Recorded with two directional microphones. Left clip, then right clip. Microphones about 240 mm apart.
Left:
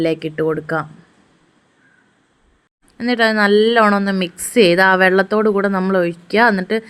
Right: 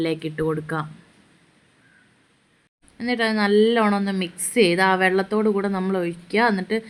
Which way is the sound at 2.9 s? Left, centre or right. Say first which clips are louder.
Left 7 dB; centre.